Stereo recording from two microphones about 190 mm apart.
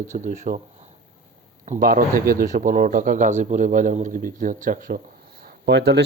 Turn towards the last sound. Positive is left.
turn(degrees=-65)  # may be behind; listen again after turning